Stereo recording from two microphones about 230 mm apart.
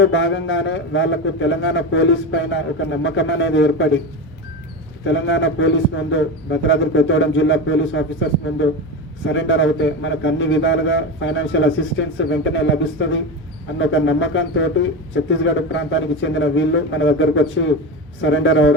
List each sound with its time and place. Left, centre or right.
0.0 s speech: left
5.0 s speech: left
9.2 s speech: left